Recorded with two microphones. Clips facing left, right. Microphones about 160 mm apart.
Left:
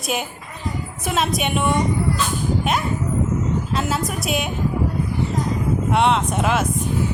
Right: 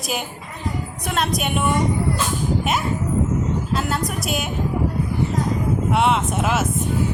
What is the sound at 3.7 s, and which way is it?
Speech, centre (ahead or behind).